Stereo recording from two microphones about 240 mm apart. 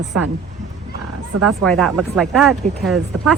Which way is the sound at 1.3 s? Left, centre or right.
Right.